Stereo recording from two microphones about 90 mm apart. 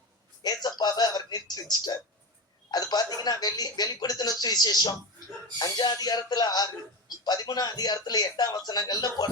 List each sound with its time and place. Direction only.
0.4 s music: 50° left (ahead or behind)
2.6 s a man's voice: 50° left (ahead or behind)